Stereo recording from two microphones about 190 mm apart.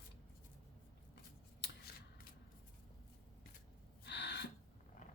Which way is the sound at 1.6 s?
60° left (ahead or behind).